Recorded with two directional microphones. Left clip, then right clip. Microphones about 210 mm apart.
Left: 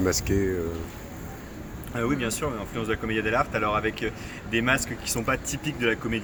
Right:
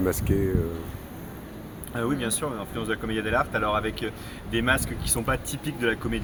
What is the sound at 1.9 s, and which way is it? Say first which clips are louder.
Speech: left 1 dB; 20° left (ahead or behind).